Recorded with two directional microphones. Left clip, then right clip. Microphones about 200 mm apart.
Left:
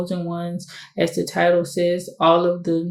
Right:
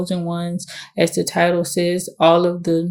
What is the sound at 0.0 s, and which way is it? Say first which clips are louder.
Speech: right 2 dB; 50° right (ahead or behind).